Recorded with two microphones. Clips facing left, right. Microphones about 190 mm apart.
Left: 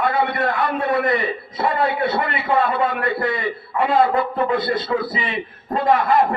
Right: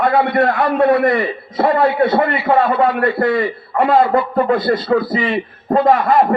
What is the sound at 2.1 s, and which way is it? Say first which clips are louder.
A man's voice: right 6 dB; 55° right (ahead or behind).